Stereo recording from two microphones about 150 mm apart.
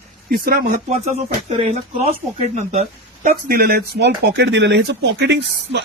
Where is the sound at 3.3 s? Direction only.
80° right.